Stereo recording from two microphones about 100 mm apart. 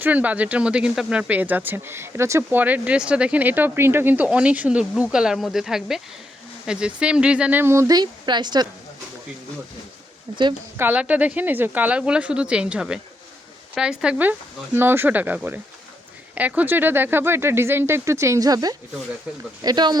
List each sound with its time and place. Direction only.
0.0 s speech: 15° right (ahead or behind)
2.6 s speech: 15° right (ahead or behind)
7.6 s speech: 30° right (ahead or behind); by 8.6 s 45° right (ahead or behind)
10.3 s speech: 45° right (ahead or behind)
10.8 s speech: 15° right (ahead or behind); by 20.0 s 45° right (ahead or behind)